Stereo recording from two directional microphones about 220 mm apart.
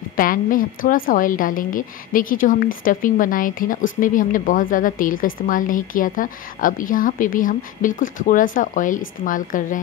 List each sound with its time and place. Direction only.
0.1 s a woman's voice: 40° left (ahead or behind)